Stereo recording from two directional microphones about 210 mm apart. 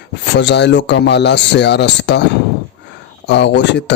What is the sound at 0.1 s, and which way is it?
Speech, 55° left (ahead or behind).